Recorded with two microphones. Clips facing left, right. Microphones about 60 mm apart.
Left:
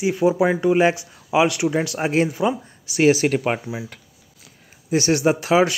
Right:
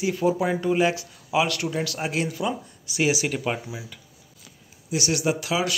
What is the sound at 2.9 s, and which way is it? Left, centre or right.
Speech, left.